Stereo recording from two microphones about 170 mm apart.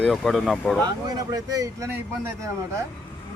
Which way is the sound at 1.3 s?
20° right (ahead or behind).